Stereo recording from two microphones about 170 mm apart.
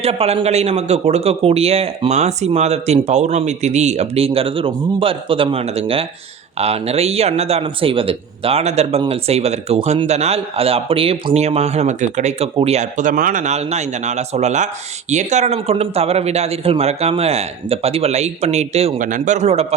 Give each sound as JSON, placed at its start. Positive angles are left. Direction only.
{"t": 0.0, "sound": "a man's voice", "side_deg": -35}
{"t": 18.9, "sound": "speech", "side_deg": -50}